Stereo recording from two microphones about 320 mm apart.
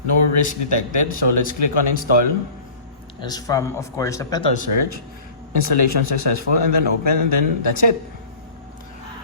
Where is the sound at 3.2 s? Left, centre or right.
Centre.